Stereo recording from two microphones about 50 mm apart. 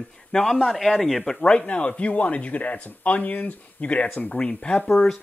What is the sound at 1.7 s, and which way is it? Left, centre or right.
Speech, left.